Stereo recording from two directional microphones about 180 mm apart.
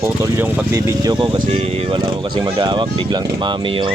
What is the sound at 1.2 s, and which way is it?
Speech, 30° right (ahead or behind).